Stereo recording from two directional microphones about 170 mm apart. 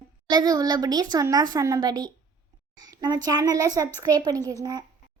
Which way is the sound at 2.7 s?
25° right (ahead or behind).